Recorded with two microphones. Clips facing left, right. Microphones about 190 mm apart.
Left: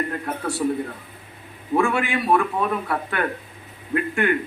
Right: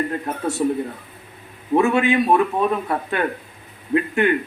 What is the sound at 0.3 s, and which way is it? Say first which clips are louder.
Speech: right 1 dB; 25° right (ahead or behind).